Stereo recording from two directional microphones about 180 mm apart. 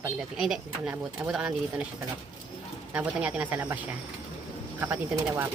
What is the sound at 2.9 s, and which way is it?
Speech, 5° right (ahead or behind).